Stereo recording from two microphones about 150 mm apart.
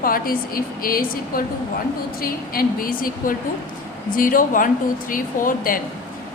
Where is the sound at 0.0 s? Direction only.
75° left (ahead or behind).